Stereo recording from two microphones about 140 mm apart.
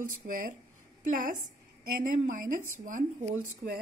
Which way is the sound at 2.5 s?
70° right (ahead or behind).